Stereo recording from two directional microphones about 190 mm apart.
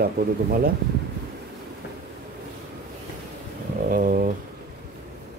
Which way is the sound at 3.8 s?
45° right (ahead or behind).